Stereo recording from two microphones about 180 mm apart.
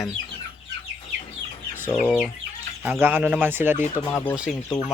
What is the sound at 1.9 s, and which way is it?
Speech, 5° left (ahead or behind).